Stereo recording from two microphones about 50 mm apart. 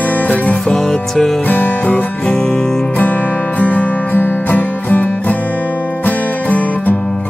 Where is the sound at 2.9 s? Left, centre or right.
Left.